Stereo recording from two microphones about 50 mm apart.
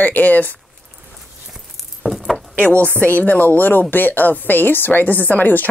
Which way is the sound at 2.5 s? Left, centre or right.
Left.